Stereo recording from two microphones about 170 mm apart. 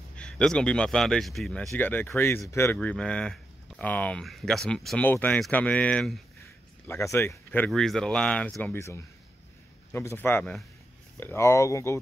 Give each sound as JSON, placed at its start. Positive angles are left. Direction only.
{"t": 0.1, "sound": "speech", "side_deg": 5}